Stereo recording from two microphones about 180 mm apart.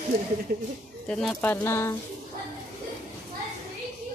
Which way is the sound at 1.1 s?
5° left (ahead or behind).